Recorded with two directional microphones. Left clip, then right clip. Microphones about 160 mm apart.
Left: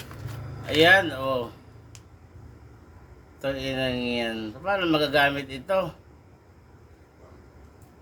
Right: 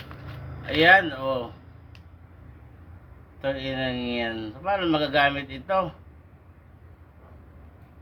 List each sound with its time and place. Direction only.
0.6 s speech: 10° left (ahead or behind)
3.4 s speech: 20° left (ahead or behind)